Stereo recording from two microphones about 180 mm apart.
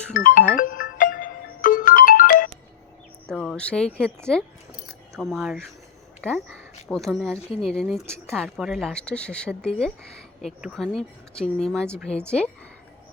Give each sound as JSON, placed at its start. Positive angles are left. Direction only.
{"t": 0.1, "sound": "music", "side_deg": 50}
{"t": 3.2, "sound": "a woman's voice", "side_deg": 5}
{"t": 6.8, "sound": "a woman's voice", "side_deg": 0}